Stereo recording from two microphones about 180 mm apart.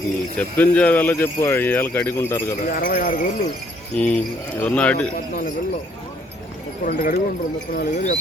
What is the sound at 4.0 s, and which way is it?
Speech, 10° left (ahead or behind).